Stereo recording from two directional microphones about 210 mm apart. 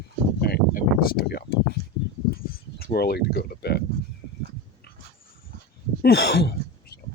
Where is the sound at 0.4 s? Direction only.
45° left (ahead or behind).